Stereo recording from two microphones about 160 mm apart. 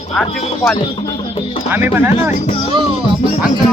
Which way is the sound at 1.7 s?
15° right (ahead or behind).